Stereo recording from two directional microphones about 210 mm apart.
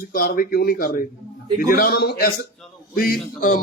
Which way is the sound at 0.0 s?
45° left (ahead or behind).